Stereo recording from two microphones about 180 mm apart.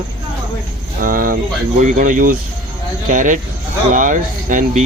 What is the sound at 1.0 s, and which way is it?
Speech, 50° right (ahead or behind).